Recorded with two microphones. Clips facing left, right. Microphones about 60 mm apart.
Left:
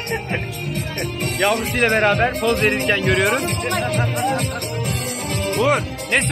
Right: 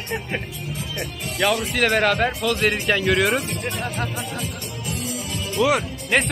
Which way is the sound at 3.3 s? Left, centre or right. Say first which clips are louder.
Left 4 dB; left.